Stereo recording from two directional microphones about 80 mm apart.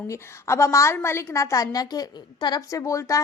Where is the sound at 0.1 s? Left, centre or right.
Left.